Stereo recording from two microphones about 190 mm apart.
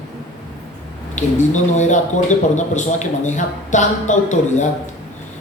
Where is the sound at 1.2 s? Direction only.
40° left (ahead or behind).